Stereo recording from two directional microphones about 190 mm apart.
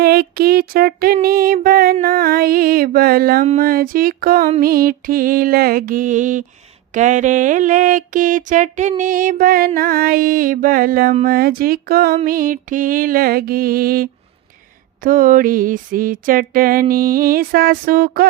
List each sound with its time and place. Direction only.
0.0 s mantra: 55° right (ahead or behind)